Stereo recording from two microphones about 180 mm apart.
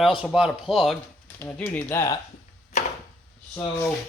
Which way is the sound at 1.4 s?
10° left (ahead or behind).